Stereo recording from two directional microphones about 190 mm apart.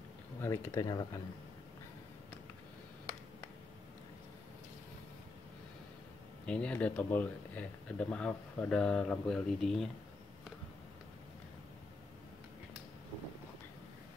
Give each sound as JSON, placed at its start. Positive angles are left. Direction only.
{"t": 0.4, "sound": "speech", "side_deg": 15}
{"t": 6.4, "sound": "speech", "side_deg": 5}